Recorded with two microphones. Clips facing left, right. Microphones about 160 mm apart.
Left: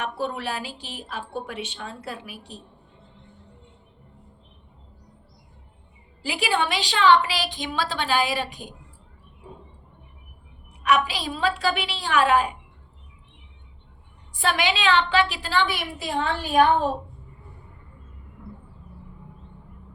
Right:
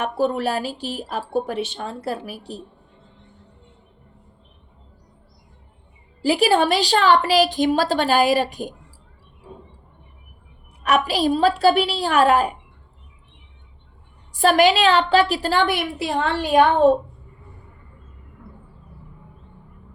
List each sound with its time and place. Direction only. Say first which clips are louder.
0.0 s a woman's voice: right 7 dB; 40° right (ahead or behind)
6.2 s a woman's voice: right 8 dB; 40° right (ahead or behind)
10.8 s a woman's voice: right 4 dB; 45° right (ahead or behind)
14.3 s a woman's voice: right 9 dB; 40° right (ahead or behind); by 16.6 s 75° right (ahead or behind)